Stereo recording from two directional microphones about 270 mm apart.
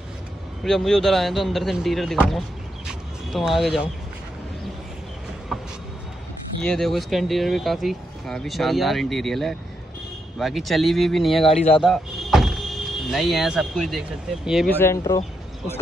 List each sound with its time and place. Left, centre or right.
0.7 s speech: centre
2.9 s a sound: centre
6.6 s speech: centre
11.5 s speech: left
11.8 s speech: centre